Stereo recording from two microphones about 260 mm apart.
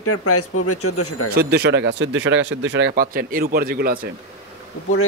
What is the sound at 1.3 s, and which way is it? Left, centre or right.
Speech, right.